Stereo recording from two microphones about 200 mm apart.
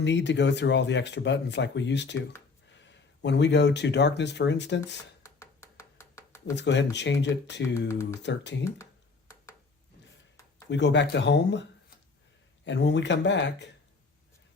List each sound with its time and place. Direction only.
0.0 s speech: 60° left (ahead or behind)
5.2 s a sound: 15° left (ahead or behind)
6.6 s speech: 60° left (ahead or behind)
8.6 s a sound: 15° left (ahead or behind)
10.7 s speech: 60° left (ahead or behind)
12.6 s speech: 60° left (ahead or behind)